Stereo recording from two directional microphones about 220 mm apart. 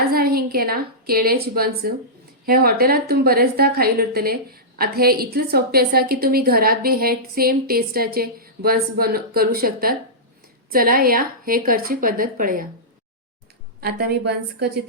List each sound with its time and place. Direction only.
0.1 s a woman's voice: 45° right (ahead or behind)
13.8 s a woman's voice: 45° right (ahead or behind)